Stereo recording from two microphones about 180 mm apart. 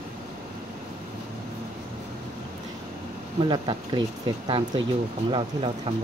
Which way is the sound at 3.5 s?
25° right (ahead or behind).